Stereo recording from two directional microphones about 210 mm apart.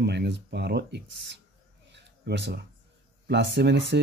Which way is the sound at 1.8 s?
55° right (ahead or behind).